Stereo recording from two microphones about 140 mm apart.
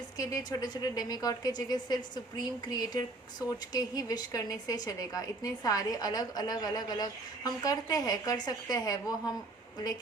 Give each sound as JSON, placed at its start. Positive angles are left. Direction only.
{"t": 0.2, "sound": "a woman's voice", "side_deg": 25}